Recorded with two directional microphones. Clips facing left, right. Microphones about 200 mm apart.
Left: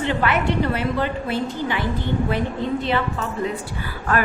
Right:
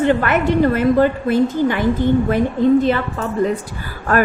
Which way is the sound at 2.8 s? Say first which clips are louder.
Right 5 dB; 45° right (ahead or behind).